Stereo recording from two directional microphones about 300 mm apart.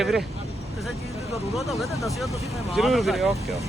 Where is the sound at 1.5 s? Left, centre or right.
Centre.